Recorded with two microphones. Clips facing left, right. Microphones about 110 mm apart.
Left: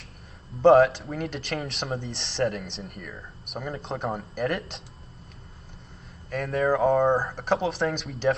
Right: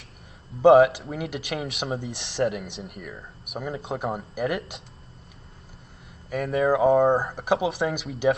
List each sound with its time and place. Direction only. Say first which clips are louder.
0.6 s speech: right 2 dB; 5° right (ahead or behind)
6.3 s speech: right 2 dB; 5° right (ahead or behind)